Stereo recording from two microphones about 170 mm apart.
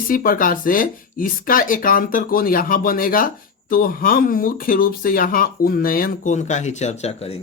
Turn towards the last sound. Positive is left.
turn(degrees=35)  # may be behind; listen again after turning